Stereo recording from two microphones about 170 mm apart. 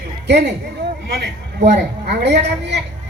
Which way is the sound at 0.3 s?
90° right.